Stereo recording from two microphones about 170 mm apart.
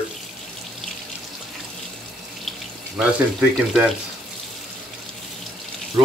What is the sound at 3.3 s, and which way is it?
Speech, centre (ahead or behind).